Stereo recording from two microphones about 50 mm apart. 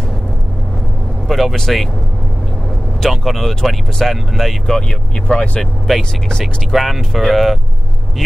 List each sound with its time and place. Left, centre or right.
1.2 s speech: centre
3.1 s speech: centre
4.6 s speech: centre
6.4 s speech: centre